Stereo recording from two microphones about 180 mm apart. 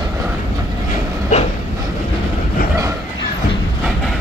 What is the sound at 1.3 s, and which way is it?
Train, 45° left (ahead or behind).